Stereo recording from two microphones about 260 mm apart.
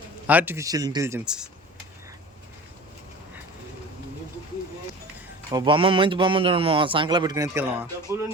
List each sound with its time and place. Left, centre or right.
0.3 s speech: centre
5.5 s a man's voice: centre